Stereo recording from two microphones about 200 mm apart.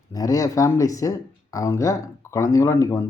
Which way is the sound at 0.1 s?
20° left (ahead or behind).